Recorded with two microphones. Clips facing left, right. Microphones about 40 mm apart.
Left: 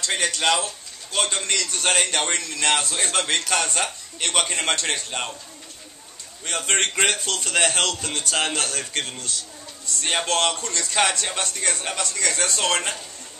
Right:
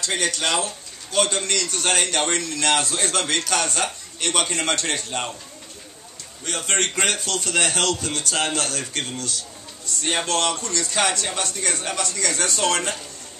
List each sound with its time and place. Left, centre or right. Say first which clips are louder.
0.0 s a man's voice: left 1 dB; centre
6.4 s a man's voice: left 1 dB; centre